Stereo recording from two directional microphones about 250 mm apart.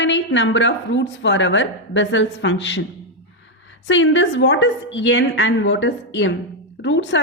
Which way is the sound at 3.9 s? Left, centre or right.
Left.